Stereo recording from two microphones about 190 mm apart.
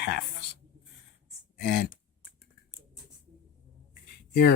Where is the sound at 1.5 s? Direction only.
60° left (ahead or behind).